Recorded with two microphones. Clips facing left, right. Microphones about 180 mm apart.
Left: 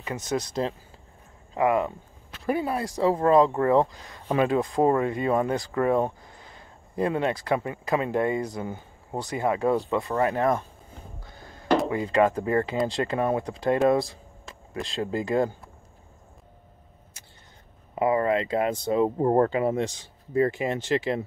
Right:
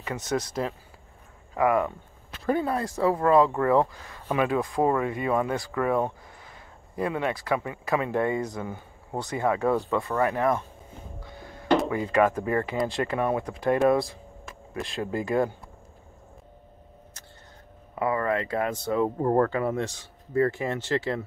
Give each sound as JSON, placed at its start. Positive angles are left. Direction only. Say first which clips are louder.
{"t": 0.0, "sound": "speech", "louder": "even", "side_deg": 15}
{"t": 1.5, "sound": "speech", "louder": "even", "side_deg": 25}
{"t": 4.0, "sound": "speech", "louder": "left 2 dB", "side_deg": 35}
{"t": 8.4, "sound": "speech", "louder": "left 1 dB", "side_deg": 35}
{"t": 9.4, "sound": "speech", "louder": "left 1 dB", "side_deg": 20}
{"t": 10.1, "sound": "speech", "louder": "left 1 dB", "side_deg": 35}
{"t": 11.2, "sound": "a sound", "louder": "right 3 dB", "side_deg": 40}
{"t": 11.9, "sound": "speech", "louder": "left 1 dB", "side_deg": 25}
{"t": 17.9, "sound": "speech", "louder": "left 3 dB", "side_deg": 20}